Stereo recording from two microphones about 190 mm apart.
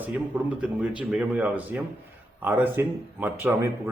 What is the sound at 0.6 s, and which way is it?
Speech, 5° right (ahead or behind).